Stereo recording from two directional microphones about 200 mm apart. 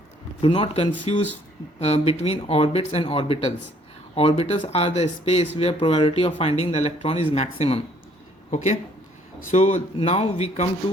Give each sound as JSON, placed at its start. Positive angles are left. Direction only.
{"t": 0.4, "sound": "speech", "side_deg": 25}